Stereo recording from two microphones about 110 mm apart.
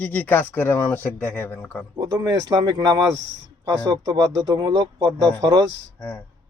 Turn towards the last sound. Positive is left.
turn(degrees=15)  # may be behind; listen again after turning